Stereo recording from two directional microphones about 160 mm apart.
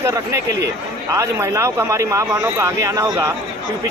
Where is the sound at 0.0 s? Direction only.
15° right (ahead or behind).